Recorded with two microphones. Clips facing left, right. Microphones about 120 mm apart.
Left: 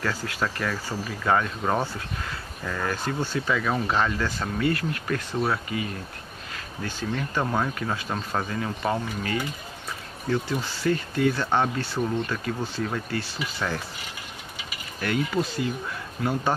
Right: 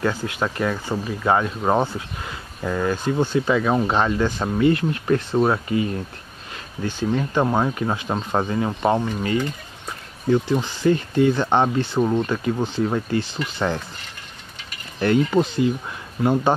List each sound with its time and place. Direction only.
0.0 s speech: 20° right (ahead or behind); by 5.9 s 35° right (ahead or behind)
6.5 s speech: 20° right (ahead or behind)
15.0 s speech: 30° right (ahead or behind)